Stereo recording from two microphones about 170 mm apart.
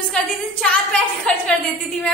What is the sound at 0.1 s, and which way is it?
A woman's voice, 5° left (ahead or behind).